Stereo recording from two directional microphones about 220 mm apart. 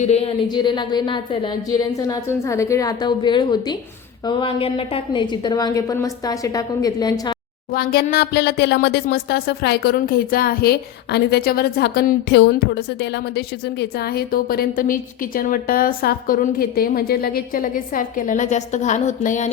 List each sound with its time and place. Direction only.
0.0 s a woman's voice: 30° left (ahead or behind)
7.7 s speech: 45° left (ahead or behind)